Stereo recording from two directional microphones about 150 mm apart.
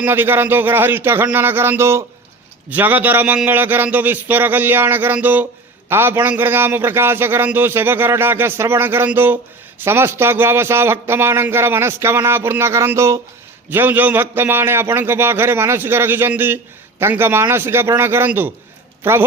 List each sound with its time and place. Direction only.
0.0 s a man's voice: 15° right (ahead or behind)